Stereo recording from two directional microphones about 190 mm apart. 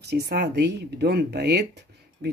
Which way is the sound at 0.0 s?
60° right (ahead or behind).